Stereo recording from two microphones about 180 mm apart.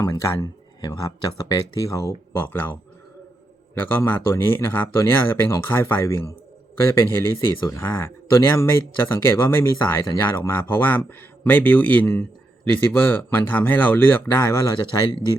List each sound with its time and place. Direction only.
0.0 s speech: 20° left (ahead or behind)
3.8 s speech: 10° left (ahead or behind)